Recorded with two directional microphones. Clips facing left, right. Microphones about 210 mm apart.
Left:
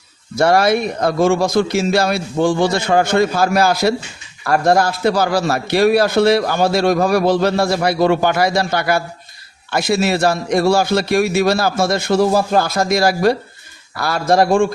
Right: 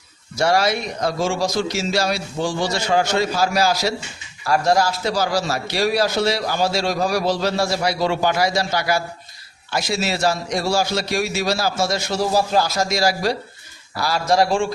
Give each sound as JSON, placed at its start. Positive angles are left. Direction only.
{"t": 0.3, "sound": "a man's voice", "side_deg": 55}